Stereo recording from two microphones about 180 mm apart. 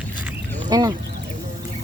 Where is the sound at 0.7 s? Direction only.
20° right (ahead or behind).